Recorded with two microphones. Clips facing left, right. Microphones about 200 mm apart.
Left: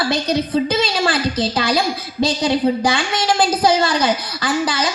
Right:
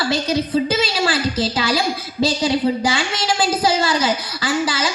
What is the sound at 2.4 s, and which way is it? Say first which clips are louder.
A woman's voice: left 3 dB; 55° left (ahead or behind).